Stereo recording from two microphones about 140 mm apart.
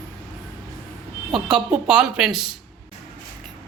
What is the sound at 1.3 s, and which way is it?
Speech, 5° right (ahead or behind).